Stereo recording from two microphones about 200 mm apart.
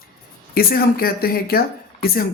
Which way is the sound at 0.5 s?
50° left (ahead or behind).